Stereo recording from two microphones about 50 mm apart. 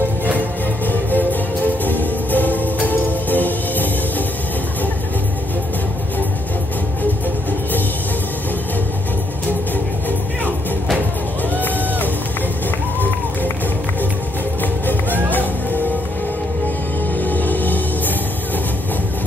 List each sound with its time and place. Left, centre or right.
0.8 s music: left
14.6 s music: left
17.2 s music: left